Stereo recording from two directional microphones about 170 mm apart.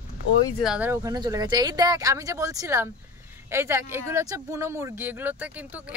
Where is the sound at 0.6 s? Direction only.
5° right (ahead or behind).